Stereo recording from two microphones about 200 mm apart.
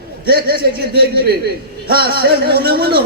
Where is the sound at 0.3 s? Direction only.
50° right (ahead or behind).